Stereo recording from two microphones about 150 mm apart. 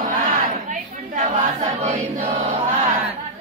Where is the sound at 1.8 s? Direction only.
40° right (ahead or behind).